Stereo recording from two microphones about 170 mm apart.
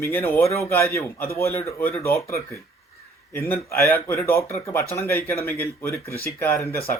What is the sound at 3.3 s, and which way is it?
Speech, 15° left (ahead or behind).